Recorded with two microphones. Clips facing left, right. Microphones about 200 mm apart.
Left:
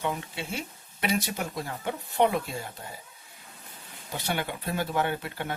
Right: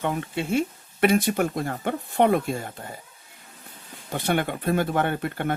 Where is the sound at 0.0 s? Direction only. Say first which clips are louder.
Right 5 dB; 55° right (ahead or behind).